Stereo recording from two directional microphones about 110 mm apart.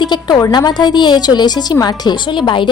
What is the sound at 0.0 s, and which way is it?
A woman's voice, 40° left (ahead or behind).